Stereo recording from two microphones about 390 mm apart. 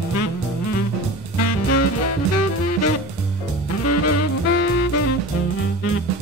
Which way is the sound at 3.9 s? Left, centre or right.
Left.